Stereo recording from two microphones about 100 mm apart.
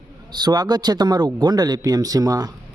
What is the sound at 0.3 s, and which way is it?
Speech, 45° right (ahead or behind).